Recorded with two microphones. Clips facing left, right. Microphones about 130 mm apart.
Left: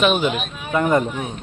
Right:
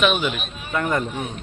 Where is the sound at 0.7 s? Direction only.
20° left (ahead or behind).